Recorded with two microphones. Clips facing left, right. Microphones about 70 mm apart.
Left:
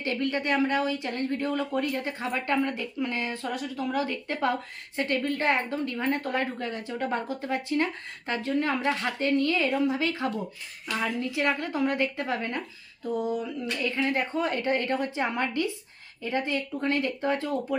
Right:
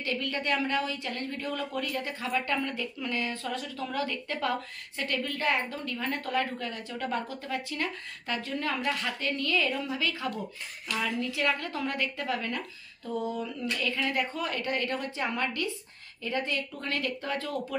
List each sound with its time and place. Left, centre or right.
0.0 s speech: left
13.0 s speech: centre